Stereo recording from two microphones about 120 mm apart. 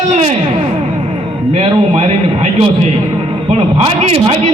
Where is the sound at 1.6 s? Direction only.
60° right (ahead or behind).